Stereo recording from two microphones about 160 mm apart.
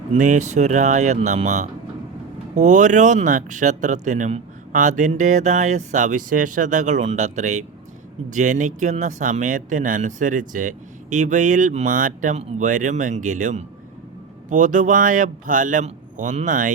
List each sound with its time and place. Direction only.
0.1 s speech: 50° right (ahead or behind)